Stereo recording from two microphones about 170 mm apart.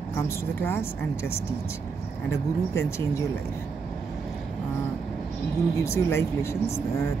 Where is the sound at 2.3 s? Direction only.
15° left (ahead or behind).